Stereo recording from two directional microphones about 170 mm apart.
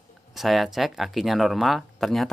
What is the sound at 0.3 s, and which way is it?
Speech, centre (ahead or behind).